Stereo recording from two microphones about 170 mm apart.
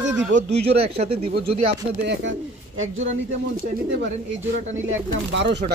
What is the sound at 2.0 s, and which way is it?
Speech, 90° right.